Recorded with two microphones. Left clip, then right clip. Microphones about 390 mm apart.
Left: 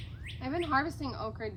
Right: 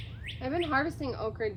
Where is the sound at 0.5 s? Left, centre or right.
Centre.